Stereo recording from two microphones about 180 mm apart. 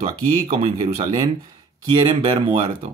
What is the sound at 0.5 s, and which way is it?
Speech, 35° right (ahead or behind).